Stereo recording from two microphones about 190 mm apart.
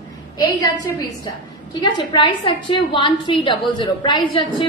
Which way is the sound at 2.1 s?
25° left (ahead or behind).